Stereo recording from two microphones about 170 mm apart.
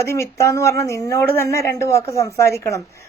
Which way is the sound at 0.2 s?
15° left (ahead or behind).